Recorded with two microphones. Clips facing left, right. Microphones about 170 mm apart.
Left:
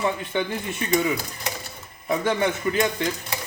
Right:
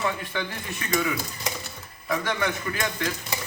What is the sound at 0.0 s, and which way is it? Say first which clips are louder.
Speech: left 4 dB; 25° left (ahead or behind).